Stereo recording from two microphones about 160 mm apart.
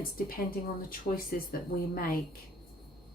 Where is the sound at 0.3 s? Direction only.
65° left (ahead or behind).